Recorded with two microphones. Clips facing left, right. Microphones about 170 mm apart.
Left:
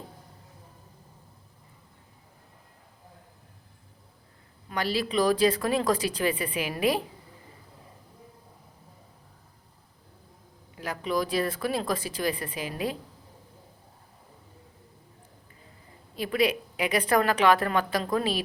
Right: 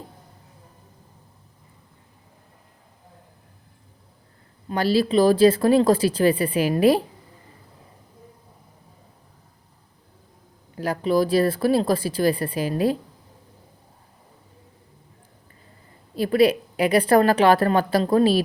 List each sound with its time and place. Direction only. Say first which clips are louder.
4.7 s speech: right 8 dB; 30° right (ahead or behind)
10.8 s speech: right 8 dB; 35° right (ahead or behind)
16.1 s speech: right 8 dB; 35° right (ahead or behind)